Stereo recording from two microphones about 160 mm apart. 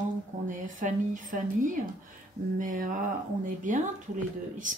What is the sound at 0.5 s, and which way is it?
Speech, 55° right (ahead or behind).